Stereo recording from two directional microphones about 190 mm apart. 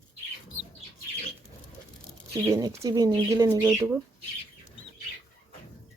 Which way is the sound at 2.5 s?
15° right (ahead or behind).